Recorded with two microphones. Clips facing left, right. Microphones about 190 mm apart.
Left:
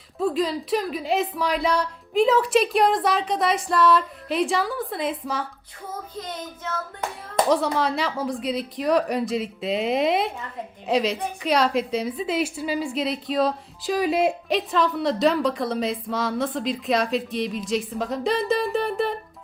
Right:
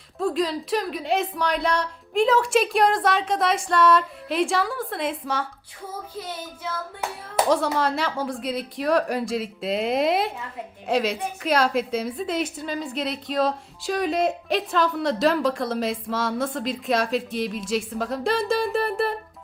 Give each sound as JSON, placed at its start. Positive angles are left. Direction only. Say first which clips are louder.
{"t": 0.2, "sound": "speech", "louder": "left 1 dB", "side_deg": 5}
{"t": 5.9, "sound": "child singing", "louder": "left 1 dB", "side_deg": -10}
{"t": 7.3, "sound": "speech", "louder": "left 1 dB", "side_deg": 0}